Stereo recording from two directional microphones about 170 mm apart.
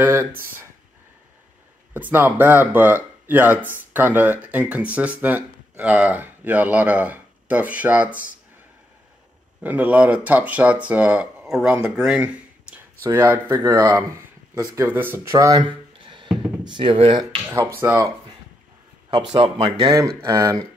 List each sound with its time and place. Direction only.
0.0 s speech: 15° right (ahead or behind)
2.0 s speech: 10° right (ahead or behind)
9.6 s speech: 10° right (ahead or behind); by 17.3 s 30° right (ahead or behind)
17.8 s speech: 15° right (ahead or behind)
19.3 s speech: 30° right (ahead or behind)
20.2 s speech: 20° right (ahead or behind)